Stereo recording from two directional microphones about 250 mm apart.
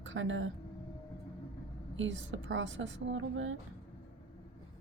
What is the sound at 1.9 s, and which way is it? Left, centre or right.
Speech, right.